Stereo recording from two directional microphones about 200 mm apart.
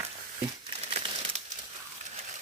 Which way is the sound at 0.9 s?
30° right (ahead or behind).